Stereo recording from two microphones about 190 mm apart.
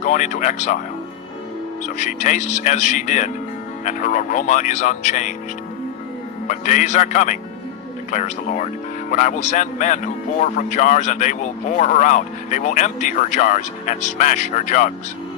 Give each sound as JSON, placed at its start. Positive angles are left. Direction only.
{"t": 0.0, "sound": "speech", "side_deg": 40}
{"t": 1.8, "sound": "speech", "side_deg": 40}
{"t": 6.5, "sound": "speech", "side_deg": 40}